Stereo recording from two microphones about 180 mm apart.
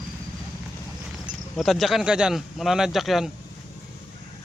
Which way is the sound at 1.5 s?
Centre (ahead or behind).